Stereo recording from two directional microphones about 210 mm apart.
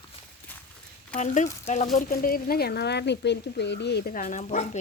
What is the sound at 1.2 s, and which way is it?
Speech, 35° left (ahead or behind).